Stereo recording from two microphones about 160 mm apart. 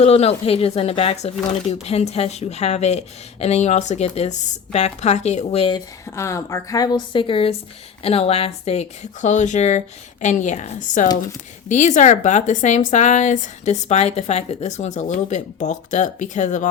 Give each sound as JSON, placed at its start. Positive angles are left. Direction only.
{"t": 0.0, "sound": "speech", "side_deg": 40}
{"t": 6.1, "sound": "a woman's voice", "side_deg": 20}